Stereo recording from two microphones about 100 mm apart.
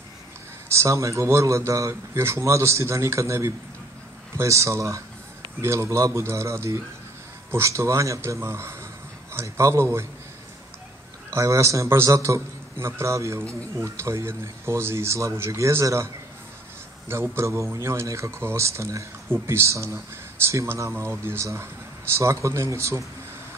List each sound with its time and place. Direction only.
0.7 s a man's voice: 30° right (ahead or behind)
11.2 s a man's voice: 30° right (ahead or behind)
17.1 s a man's voice: 25° right (ahead or behind)